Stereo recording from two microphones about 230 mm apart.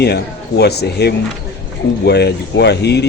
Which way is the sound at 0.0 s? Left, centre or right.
Left.